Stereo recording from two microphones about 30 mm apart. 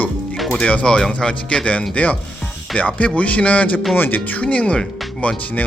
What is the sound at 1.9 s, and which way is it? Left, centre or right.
A man's voice, left.